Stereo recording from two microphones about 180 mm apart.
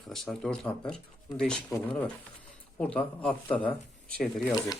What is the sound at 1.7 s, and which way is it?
Speech, 15° left (ahead or behind).